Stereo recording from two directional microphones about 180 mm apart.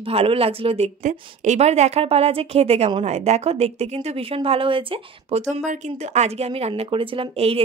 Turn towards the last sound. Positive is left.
turn(degrees=-35)  # may be behind; listen again after turning